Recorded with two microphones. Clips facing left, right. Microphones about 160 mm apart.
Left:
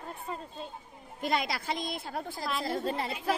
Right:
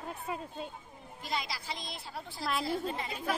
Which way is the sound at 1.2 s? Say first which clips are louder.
Left 7 dB; 55° left (ahead or behind).